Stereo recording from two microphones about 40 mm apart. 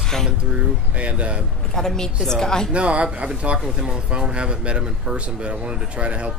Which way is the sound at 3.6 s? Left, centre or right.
Centre.